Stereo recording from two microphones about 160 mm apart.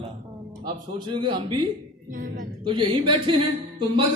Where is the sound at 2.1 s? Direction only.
60° right (ahead or behind).